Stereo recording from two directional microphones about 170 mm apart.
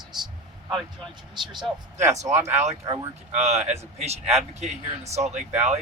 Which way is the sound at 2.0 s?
40° right (ahead or behind).